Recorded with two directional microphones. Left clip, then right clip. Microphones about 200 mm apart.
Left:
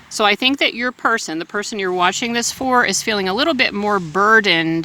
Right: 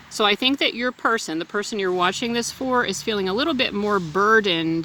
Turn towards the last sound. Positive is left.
turn(degrees=20)  # may be behind; listen again after turning